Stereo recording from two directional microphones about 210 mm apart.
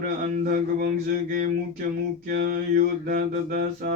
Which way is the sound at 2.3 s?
40° right (ahead or behind).